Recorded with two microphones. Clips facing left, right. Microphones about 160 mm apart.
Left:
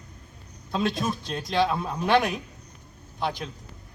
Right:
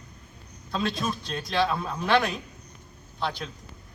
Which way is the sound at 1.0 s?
15° left (ahead or behind).